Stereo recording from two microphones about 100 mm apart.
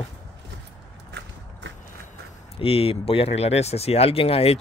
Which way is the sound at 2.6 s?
70° left (ahead or behind).